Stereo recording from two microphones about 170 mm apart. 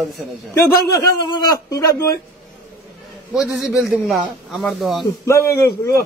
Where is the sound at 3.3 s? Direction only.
5° right (ahead or behind).